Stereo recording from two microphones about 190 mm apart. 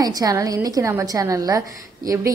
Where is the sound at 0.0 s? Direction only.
20° right (ahead or behind).